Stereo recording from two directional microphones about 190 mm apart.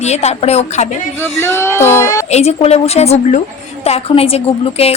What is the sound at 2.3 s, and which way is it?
A woman's voice, 35° left (ahead or behind).